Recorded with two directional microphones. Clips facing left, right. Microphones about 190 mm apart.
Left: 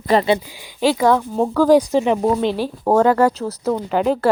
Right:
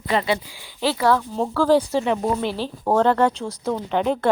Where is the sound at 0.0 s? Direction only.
40° left (ahead or behind).